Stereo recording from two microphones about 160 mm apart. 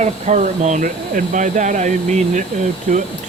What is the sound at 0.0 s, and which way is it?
Speech, 50° right (ahead or behind).